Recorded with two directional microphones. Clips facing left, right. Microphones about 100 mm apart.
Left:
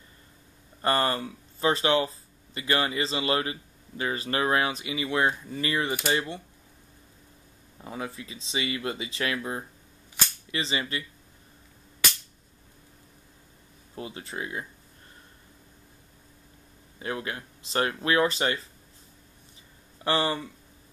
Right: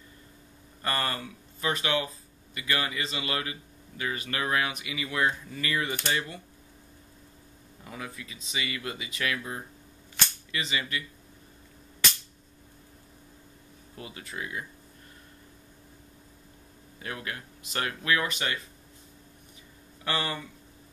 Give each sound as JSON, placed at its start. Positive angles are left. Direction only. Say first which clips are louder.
{"t": 0.8, "sound": "speech", "louder": "left 6 dB", "side_deg": 25}
{"t": 7.8, "sound": "speech", "louder": "left 5 dB", "side_deg": 25}
{"t": 13.9, "sound": "speech", "louder": "left 4 dB", "side_deg": 30}
{"t": 17.0, "sound": "speech", "louder": "left 4 dB", "side_deg": 25}
{"t": 20.0, "sound": "speech", "louder": "left 5 dB", "side_deg": 30}